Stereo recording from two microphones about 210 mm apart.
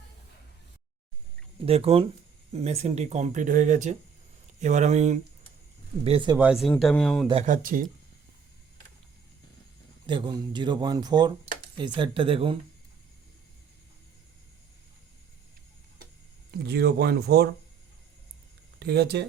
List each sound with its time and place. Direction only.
1.6 s speech: 30° right (ahead or behind)
6.3 s speech: 5° right (ahead or behind)
7.3 s speech: 35° right (ahead or behind)
10.1 s speech: 20° right (ahead or behind)
16.5 s speech: 50° right (ahead or behind)
18.8 s speech: 50° right (ahead or behind)